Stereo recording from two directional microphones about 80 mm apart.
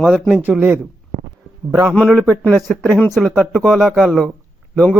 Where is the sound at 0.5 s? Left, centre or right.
Centre.